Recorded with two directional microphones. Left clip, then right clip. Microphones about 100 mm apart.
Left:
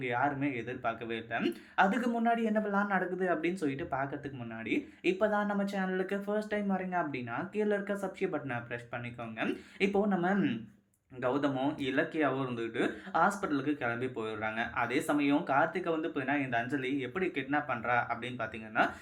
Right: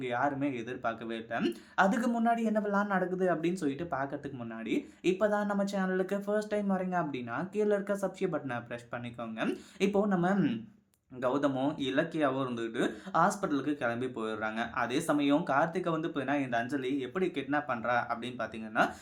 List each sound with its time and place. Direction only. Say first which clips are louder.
0.0 s speech: even; 40° right (ahead or behind)